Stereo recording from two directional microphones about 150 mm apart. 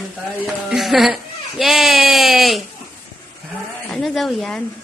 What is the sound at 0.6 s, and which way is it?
Baby cry, centre (ahead or behind).